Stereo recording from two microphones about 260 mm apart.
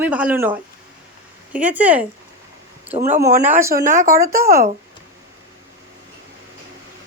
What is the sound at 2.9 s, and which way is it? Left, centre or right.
Speech, right.